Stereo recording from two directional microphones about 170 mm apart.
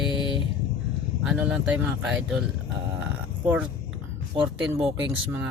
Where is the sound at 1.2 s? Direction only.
5° right (ahead or behind).